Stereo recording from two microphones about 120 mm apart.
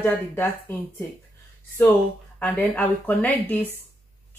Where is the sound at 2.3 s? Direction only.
10° left (ahead or behind).